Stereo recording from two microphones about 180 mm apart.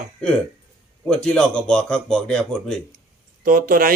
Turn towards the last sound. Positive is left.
turn(degrees=-50)  # may be behind; listen again after turning